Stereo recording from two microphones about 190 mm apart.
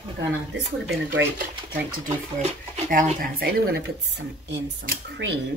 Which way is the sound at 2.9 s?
45° right (ahead or behind).